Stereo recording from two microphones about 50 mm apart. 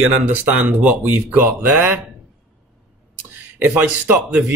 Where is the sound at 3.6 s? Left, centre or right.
Right.